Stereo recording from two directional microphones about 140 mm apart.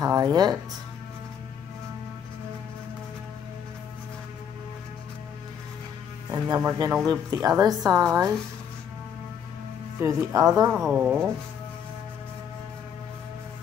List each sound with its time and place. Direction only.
0.0 s a woman's voice: 25° right (ahead or behind)
6.3 s a woman's voice: 25° right (ahead or behind)
9.9 s a woman's voice: 20° right (ahead or behind)
10.7 s speech: 5° right (ahead or behind)